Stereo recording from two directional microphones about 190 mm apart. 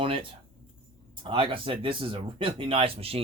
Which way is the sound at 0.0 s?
25° right (ahead or behind).